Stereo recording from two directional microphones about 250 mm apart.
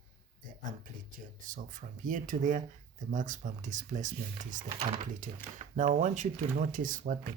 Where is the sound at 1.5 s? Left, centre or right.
Right.